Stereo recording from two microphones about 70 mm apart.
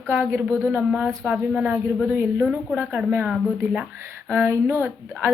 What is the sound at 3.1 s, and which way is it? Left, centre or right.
A woman's voice, right.